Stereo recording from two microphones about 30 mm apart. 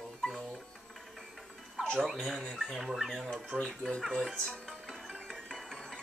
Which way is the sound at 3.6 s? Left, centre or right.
Left.